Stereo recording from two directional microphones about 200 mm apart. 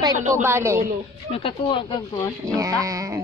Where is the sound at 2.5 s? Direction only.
15° right (ahead or behind).